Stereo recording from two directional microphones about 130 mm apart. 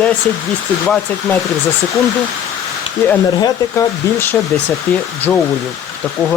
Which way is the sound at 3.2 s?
30° left (ahead or behind).